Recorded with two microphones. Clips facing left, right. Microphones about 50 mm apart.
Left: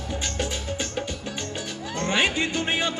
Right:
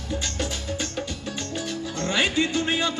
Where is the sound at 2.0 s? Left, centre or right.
Left.